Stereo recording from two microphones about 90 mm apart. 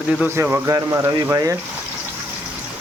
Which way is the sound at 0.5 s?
30° right (ahead or behind).